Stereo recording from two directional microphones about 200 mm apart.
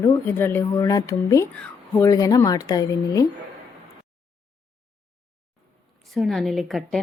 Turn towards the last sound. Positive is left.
turn(degrees=0)  # may be behind; listen again after turning